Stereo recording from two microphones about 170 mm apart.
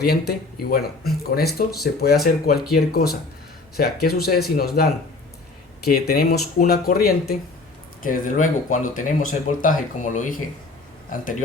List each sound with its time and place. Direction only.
0.0 s speech: 65° left (ahead or behind)
8.0 s speech: 50° left (ahead or behind)